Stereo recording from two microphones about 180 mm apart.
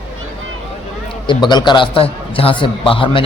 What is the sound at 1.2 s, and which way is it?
A man's voice, 25° left (ahead or behind).